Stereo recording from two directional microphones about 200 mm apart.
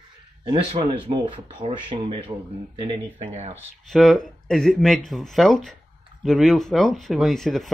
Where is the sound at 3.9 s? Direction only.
Centre (ahead or behind).